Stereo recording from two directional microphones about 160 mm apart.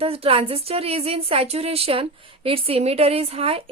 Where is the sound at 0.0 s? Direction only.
35° right (ahead or behind).